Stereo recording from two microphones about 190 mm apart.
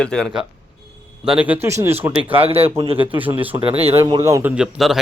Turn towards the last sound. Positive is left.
turn(degrees=0)  # may be behind; listen again after turning